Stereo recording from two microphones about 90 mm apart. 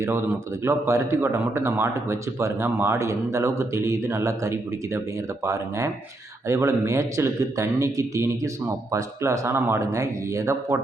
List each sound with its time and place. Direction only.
0.0 s a man's voice: 30° right (ahead or behind)